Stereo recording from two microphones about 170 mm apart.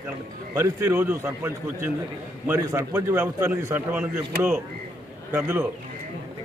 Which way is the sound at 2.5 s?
15° right (ahead or behind).